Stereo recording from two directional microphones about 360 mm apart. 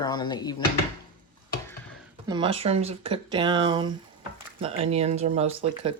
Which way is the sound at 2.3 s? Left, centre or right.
Centre.